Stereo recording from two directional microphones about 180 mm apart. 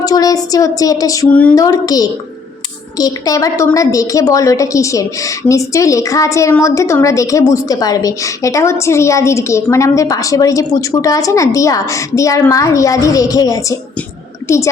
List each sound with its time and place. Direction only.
0.0 s a woman's voice: 20° left (ahead or behind)